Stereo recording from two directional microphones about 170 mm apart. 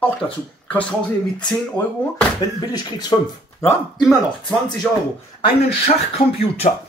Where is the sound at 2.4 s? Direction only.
25° left (ahead or behind).